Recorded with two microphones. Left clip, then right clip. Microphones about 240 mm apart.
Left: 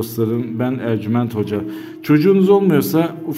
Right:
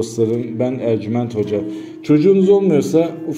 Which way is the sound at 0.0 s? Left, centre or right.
Left.